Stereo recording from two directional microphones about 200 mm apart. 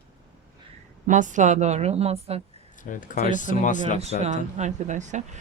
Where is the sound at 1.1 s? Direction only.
40° right (ahead or behind).